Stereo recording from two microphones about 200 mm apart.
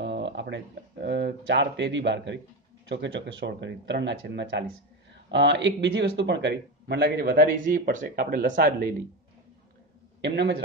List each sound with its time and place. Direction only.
0.0 s a sound: 60° right (ahead or behind)
1.0 s speech: 60° right (ahead or behind)
10.2 s speech: 60° right (ahead or behind)